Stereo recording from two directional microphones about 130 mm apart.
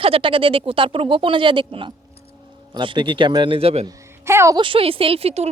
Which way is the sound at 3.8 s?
20° right (ahead or behind).